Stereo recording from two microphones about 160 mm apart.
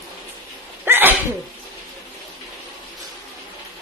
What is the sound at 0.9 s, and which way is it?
Sneeze, 15° right (ahead or behind).